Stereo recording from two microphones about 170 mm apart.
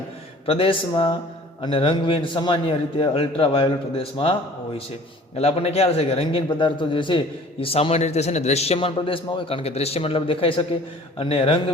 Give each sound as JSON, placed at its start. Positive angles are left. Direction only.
{"t": 0.4, "sound": "a man's voice", "side_deg": 35}
{"t": 5.4, "sound": "a man's voice", "side_deg": 35}